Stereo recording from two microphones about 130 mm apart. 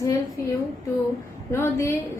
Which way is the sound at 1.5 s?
20° left (ahead or behind).